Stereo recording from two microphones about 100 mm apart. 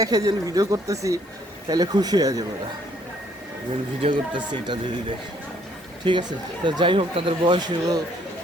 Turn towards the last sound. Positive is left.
turn(degrees=-45)  # may be behind; listen again after turning